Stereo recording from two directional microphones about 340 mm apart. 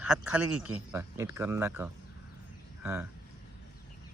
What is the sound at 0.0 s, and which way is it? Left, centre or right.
Speech, centre.